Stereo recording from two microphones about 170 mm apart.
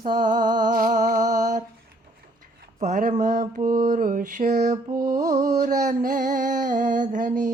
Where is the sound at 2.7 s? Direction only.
45° right (ahead or behind).